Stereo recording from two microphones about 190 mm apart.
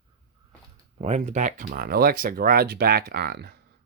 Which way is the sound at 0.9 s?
35° right (ahead or behind).